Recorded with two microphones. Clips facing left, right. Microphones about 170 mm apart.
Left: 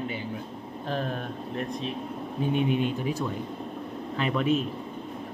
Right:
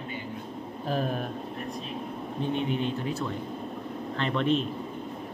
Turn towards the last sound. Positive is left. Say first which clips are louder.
# left 1 dB
turn(degrees=5)  # may be behind; listen again after turning